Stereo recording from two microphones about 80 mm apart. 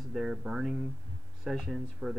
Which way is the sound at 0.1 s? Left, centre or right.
Centre.